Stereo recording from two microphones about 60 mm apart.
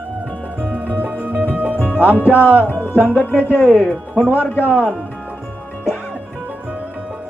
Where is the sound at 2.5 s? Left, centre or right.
Left.